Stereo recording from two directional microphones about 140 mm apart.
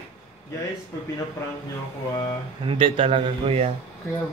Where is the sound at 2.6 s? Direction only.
40° right (ahead or behind).